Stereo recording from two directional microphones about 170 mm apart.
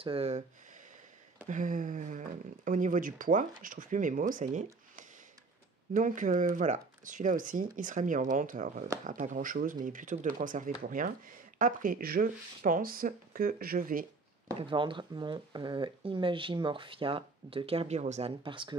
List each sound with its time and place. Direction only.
0.0 s speech: 35° right (ahead or behind)
1.5 s speech: 50° right (ahead or behind)
5.9 s speech: 50° right (ahead or behind)
14.6 s speech: 30° right (ahead or behind)
18.4 s speech: 30° right (ahead or behind)